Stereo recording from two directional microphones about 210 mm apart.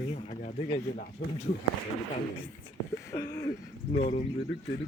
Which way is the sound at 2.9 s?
15° left (ahead or behind).